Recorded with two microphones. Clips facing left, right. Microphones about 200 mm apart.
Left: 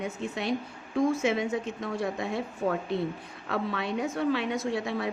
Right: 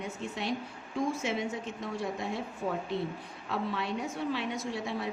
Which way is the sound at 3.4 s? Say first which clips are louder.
Left 3 dB; 65° left (ahead or behind).